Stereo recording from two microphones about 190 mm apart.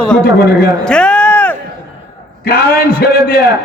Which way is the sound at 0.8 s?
5° left (ahead or behind).